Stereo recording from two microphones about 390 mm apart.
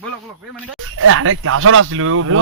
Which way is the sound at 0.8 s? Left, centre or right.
Right.